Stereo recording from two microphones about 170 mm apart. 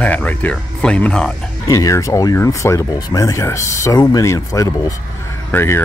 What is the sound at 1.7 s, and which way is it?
Speech, 20° left (ahead or behind).